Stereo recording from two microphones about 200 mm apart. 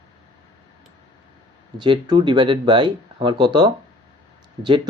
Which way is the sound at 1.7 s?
20° right (ahead or behind).